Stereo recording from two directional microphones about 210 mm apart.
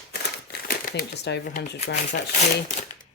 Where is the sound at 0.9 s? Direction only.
45° left (ahead or behind).